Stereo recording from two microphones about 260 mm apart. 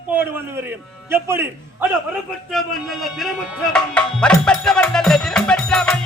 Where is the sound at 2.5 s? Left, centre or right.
Centre.